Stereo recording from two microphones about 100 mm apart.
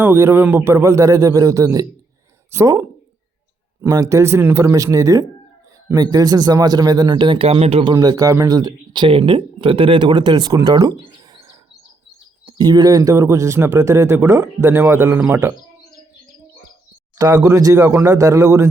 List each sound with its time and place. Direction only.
0.0 s a man's voice: 25° right (ahead or behind)
3.8 s speech: 40° right (ahead or behind); by 7.4 s 55° right (ahead or behind)
7.4 s speech: 90° right
7.9 s speech: 40° right (ahead or behind)
10.5 s speech: 35° right (ahead or behind)
12.5 s speech: 45° right (ahead or behind)
14.7 s a man's voice: 20° right (ahead or behind)
17.2 s speech: 40° right (ahead or behind)